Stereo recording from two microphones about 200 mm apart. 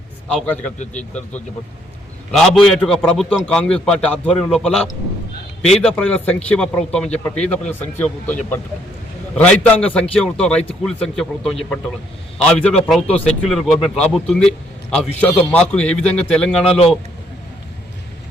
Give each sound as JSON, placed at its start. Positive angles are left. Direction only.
{"t": 0.3, "sound": "a man's voice", "side_deg": 5}
{"t": 2.3, "sound": "a man's voice", "side_deg": 0}